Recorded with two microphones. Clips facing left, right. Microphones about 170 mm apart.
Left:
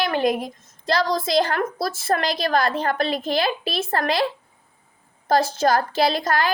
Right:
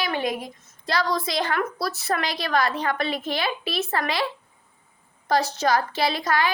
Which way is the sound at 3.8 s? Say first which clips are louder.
Left 2 dB; 45° left (ahead or behind).